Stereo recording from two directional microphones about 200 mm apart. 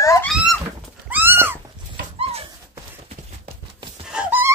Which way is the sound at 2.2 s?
30° right (ahead or behind).